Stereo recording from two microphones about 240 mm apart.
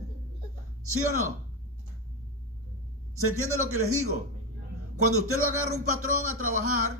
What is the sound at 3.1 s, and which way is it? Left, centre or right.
A man's voice, right.